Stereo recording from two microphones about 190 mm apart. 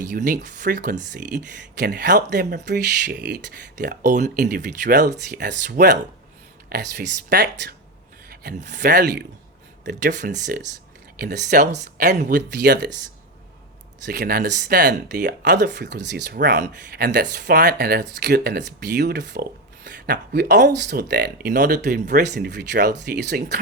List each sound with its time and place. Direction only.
0.0 s speech: 45° right (ahead or behind)
1.7 s speech: 65° right (ahead or behind)
4.0 s speech: 40° right (ahead or behind)
5.4 s speech: 60° right (ahead or behind)
8.8 s speech: 60° right (ahead or behind)
10.2 s speech: 40° right (ahead or behind)
11.2 s speech: 60° right (ahead or behind)
14.0 s speech: 55° right (ahead or behind)